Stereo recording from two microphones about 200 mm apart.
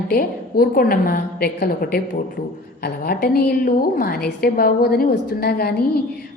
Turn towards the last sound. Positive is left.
turn(degrees=50)  # may be behind; listen again after turning